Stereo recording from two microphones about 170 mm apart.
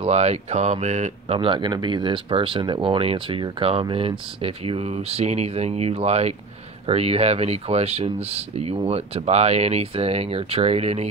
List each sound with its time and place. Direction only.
0.0 s speech: 40° right (ahead or behind)